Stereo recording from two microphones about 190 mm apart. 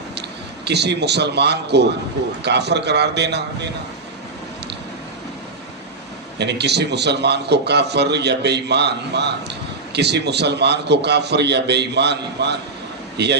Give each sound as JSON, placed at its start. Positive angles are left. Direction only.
{"t": 0.2, "sound": "a man's voice", "side_deg": -60}
{"t": 6.4, "sound": "a man's voice", "side_deg": -60}